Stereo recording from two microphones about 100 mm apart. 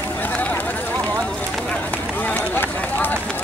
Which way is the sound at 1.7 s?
15° left (ahead or behind).